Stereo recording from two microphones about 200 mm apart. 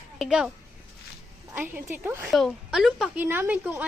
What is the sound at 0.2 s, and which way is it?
Speech, 5° right (ahead or behind).